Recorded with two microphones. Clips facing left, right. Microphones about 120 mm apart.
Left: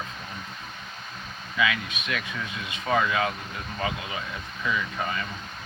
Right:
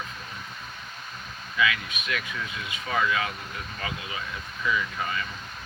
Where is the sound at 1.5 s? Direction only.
25° left (ahead or behind).